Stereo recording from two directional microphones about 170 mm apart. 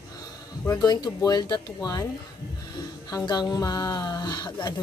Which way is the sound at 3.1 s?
25° left (ahead or behind).